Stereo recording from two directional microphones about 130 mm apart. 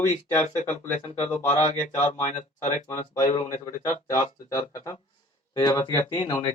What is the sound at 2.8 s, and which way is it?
Speech, 25° left (ahead or behind).